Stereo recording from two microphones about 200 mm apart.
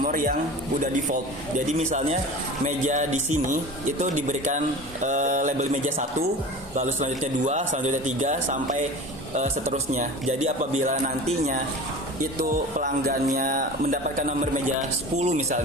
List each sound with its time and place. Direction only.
0.0 s a man's voice: 45° right (ahead or behind)